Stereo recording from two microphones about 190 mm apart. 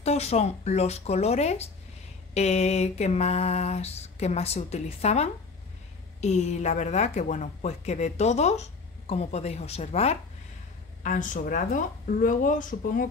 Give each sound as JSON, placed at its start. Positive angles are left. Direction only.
{"t": 0.0, "sound": "speech", "side_deg": 35}